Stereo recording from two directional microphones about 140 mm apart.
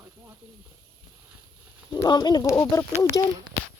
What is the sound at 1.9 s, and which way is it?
Speech, 30° left (ahead or behind).